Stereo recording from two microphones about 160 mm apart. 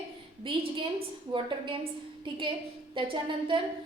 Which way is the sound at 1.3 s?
35° right (ahead or behind).